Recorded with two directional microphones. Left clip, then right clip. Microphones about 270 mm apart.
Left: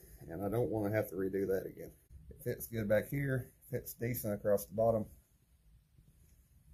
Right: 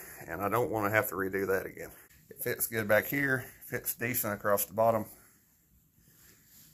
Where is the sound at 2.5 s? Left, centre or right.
Centre.